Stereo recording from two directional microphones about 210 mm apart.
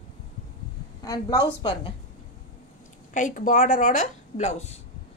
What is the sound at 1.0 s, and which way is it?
Speech, 15° left (ahead or behind).